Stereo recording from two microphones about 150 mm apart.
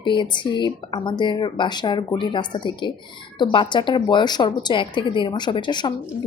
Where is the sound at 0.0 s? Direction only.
30° left (ahead or behind).